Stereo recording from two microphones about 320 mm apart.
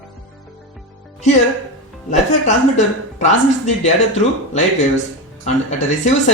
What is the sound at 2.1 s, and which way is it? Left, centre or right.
Speech, left.